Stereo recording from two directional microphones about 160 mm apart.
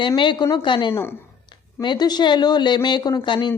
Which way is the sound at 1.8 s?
25° left (ahead or behind).